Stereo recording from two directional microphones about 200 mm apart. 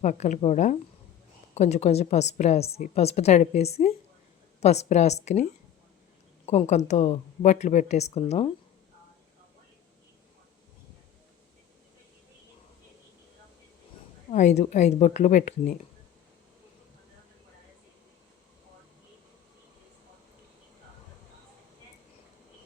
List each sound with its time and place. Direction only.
0.0 s a woman's voice: 40° left (ahead or behind)
14.3 s a woman's voice: 35° left (ahead or behind)